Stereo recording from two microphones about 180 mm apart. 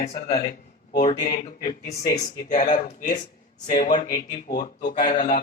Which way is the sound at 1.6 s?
50° left (ahead or behind).